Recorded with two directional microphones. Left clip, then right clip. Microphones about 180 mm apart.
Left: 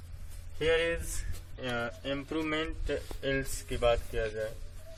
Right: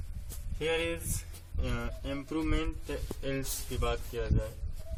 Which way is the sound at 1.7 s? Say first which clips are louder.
Left 5 dB; 10° right (ahead or behind).